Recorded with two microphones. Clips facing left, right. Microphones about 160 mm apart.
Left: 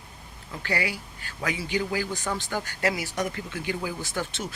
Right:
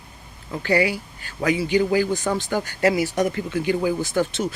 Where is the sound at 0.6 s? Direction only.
25° right (ahead or behind).